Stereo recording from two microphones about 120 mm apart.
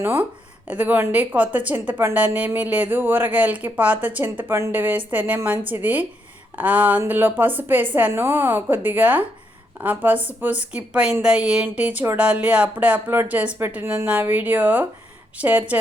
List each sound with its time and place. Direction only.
0.0 s a woman's voice: 15° right (ahead or behind)